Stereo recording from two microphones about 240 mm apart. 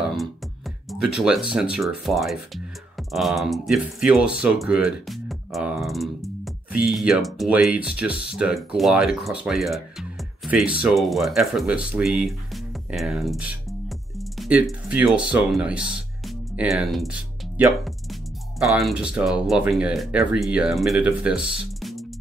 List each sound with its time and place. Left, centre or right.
0.8 s speech: centre
18.6 s speech: centre